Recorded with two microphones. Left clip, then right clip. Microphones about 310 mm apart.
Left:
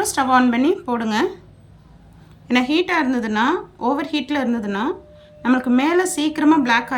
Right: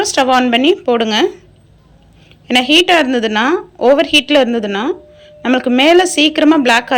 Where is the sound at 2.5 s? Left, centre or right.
Centre.